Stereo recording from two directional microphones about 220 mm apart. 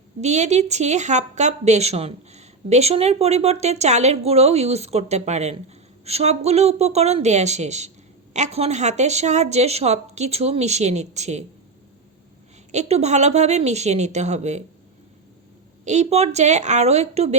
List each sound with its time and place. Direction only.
0.2 s speech: 30° right (ahead or behind)
12.7 s speech: 30° right (ahead or behind)
15.8 s speech: 30° right (ahead or behind)